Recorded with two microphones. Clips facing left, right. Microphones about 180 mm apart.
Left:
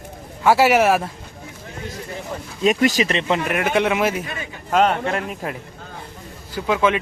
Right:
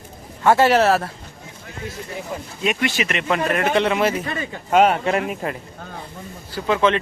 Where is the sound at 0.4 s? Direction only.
10° left (ahead or behind).